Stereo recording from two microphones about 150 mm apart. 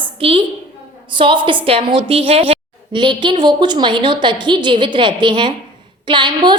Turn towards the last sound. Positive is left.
turn(degrees=-30)  # may be behind; listen again after turning